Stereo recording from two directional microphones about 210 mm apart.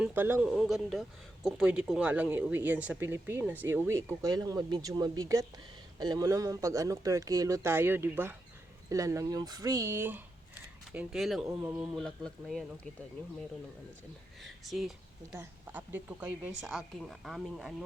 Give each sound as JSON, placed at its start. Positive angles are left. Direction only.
{"t": 0.0, "sound": "a woman's voice", "side_deg": -10}
{"t": 11.9, "sound": "a woman's voice", "side_deg": 0}
{"t": 14.4, "sound": "a woman's voice", "side_deg": 0}